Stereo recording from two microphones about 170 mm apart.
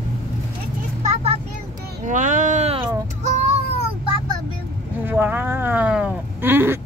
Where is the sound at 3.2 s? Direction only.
40° right (ahead or behind).